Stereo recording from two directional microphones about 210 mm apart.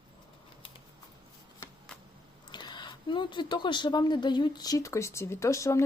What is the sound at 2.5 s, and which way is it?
Speech, 20° left (ahead or behind).